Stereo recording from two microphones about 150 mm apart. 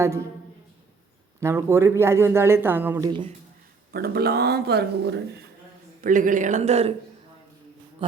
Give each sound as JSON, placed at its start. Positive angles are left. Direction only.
{"t": 1.4, "sound": "speech", "side_deg": -15}
{"t": 3.0, "sound": "speech", "side_deg": -30}
{"t": 3.9, "sound": "speech", "side_deg": -90}
{"t": 6.0, "sound": "speech", "side_deg": -65}